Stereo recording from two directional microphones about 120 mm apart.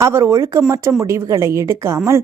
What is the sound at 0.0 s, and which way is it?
A woman's voice, 25° right (ahead or behind).